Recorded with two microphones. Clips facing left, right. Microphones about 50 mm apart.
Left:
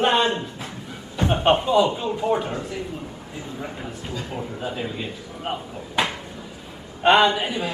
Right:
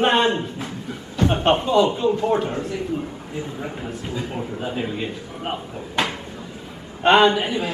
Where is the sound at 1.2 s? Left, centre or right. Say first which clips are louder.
Right 2 dB; left.